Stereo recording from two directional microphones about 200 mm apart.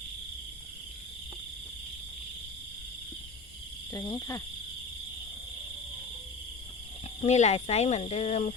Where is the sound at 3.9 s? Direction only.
15° left (ahead or behind).